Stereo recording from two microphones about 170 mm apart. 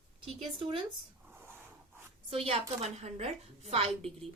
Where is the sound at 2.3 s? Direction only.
35° right (ahead or behind).